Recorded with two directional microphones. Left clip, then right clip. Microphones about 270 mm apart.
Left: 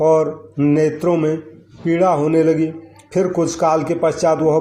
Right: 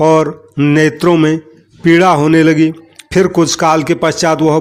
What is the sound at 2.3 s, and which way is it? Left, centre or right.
A man's voice, right.